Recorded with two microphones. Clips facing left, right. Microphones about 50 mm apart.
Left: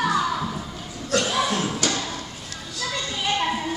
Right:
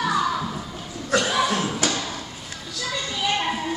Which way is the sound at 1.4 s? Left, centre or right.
Centre.